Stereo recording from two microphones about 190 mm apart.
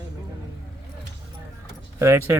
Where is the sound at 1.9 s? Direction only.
15° right (ahead or behind).